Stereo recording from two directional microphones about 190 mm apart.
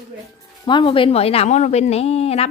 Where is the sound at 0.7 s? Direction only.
25° left (ahead or behind).